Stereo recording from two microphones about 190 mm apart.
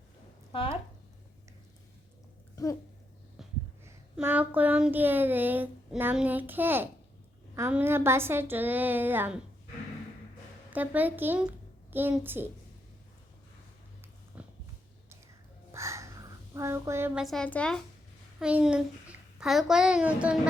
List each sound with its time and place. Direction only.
0.5 s speech: 30° left (ahead or behind)
2.6 s speech: 20° left (ahead or behind)
3.8 s speech: 10° right (ahead or behind)
10.7 s a child's voice: 10° right (ahead or behind)
14.3 s a sound: 5° right (ahead or behind)
15.7 s a sound: 15° right (ahead or behind)
16.6 s speech: 15° right (ahead or behind)
17.2 s speech: 5° left (ahead or behind)
18.3 s a child's voice: 5° right (ahead or behind)